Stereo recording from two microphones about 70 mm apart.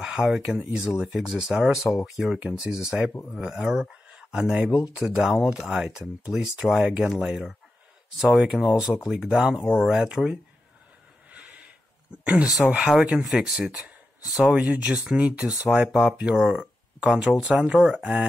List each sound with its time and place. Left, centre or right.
0.0 s speech: centre
11.3 s snort: centre
12.3 s speech: centre